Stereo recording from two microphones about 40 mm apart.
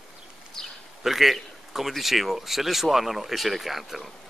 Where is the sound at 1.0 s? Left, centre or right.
Centre.